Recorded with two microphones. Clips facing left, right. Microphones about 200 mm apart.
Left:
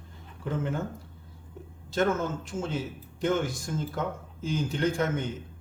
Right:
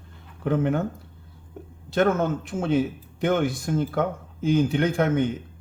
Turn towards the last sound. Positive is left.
turn(degrees=-60)  # may be behind; listen again after turning